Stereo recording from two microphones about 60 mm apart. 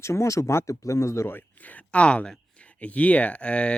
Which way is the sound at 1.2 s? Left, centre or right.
Left.